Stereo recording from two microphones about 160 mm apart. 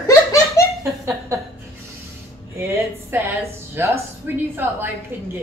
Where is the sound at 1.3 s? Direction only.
20° right (ahead or behind).